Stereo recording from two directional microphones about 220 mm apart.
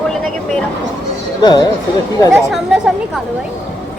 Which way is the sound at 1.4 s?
20° left (ahead or behind).